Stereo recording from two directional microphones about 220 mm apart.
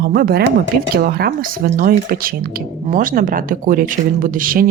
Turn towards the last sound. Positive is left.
turn(degrees=-40)  # may be behind; listen again after turning